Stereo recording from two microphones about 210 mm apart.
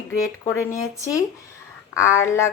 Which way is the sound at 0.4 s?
15° left (ahead or behind).